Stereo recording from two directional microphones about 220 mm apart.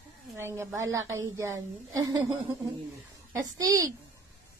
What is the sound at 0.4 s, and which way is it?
A child's voice, 10° right (ahead or behind).